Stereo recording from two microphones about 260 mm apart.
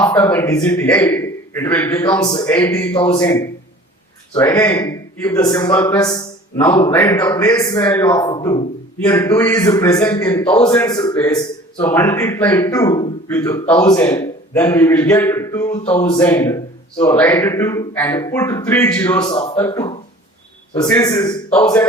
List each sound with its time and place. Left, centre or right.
0.0 s speech: centre
15.8 s a sound: left
16.2 s speech: centre